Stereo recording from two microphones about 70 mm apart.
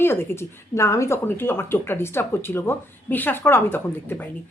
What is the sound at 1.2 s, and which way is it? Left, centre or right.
A woman's voice, left.